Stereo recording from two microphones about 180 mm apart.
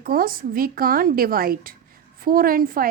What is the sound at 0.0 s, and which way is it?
A woman's voice, 55° right (ahead or behind).